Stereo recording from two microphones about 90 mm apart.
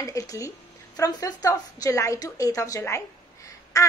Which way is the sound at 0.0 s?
40° left (ahead or behind).